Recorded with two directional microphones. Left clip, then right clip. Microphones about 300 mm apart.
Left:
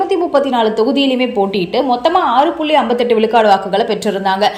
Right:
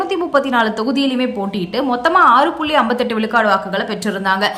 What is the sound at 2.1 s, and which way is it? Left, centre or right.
Speech, right.